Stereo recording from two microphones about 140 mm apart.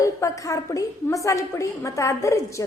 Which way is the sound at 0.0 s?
20° left (ahead or behind).